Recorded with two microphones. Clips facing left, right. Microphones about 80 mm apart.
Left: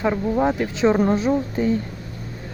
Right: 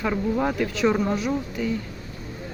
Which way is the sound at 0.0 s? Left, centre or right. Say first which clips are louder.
Left 4 dB; left.